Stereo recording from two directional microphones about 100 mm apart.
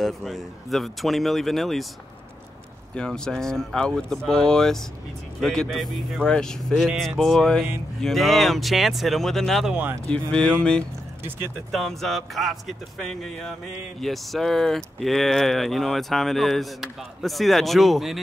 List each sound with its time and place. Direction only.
0.0 s speech: centre (ahead or behind)
3.0 s speech: 5° left (ahead or behind)
11.7 s speech: centre (ahead or behind)